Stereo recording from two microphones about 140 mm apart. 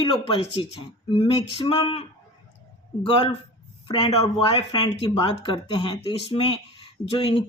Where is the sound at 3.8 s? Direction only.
40° left (ahead or behind).